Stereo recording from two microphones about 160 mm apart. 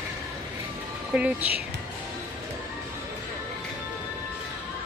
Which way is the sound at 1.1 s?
10° right (ahead or behind).